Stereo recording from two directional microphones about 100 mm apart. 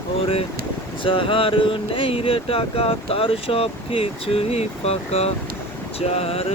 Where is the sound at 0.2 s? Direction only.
75° left (ahead or behind).